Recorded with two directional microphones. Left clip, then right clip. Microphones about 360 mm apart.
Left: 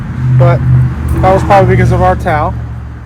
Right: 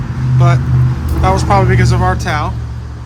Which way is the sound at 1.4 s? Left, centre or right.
Centre.